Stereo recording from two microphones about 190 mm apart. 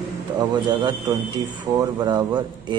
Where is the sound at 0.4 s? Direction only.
25° right (ahead or behind).